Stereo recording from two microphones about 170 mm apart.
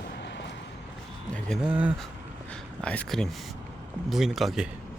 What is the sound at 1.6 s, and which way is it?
Speech, 5° right (ahead or behind).